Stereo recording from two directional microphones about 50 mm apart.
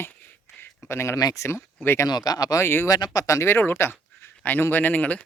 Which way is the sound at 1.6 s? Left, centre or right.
Left.